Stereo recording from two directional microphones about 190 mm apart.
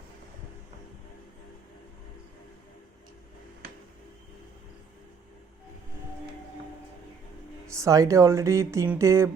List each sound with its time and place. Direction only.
7.7 s speech: 15° right (ahead or behind)